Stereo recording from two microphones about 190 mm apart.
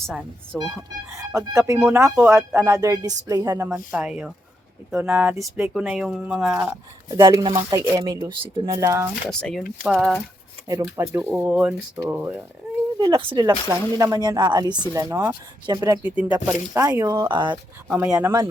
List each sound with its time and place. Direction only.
0.5 s speech: centre (ahead or behind)
1.1 s speech: 15° right (ahead or behind)
3.9 s speech: 5° right (ahead or behind)
7.2 s speech: 20° right (ahead or behind)
9.4 s speech: 5° left (ahead or behind)
10.9 s speech: 15° right (ahead or behind)
13.0 s speech: 25° right (ahead or behind)
17.5 s speech: 5° right (ahead or behind)